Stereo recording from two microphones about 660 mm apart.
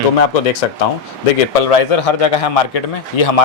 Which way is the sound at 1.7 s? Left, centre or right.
Left.